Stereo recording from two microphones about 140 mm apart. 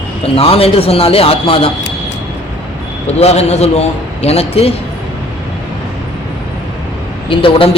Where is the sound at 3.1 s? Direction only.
50° left (ahead or behind).